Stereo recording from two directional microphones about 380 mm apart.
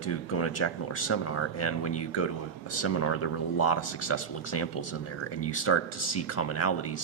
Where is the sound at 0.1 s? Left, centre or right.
Left.